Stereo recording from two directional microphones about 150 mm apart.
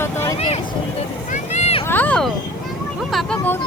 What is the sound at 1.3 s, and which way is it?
Vehicle, 50° left (ahead or behind).